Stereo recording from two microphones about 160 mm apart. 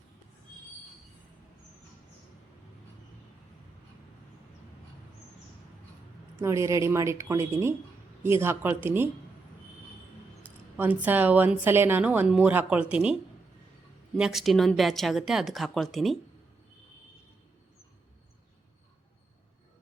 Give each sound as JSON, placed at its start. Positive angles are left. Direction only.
{"t": 6.3, "sound": "a woman's voice", "side_deg": -20}
{"t": 10.8, "sound": "a woman's voice", "side_deg": -10}
{"t": 14.2, "sound": "speech", "side_deg": 0}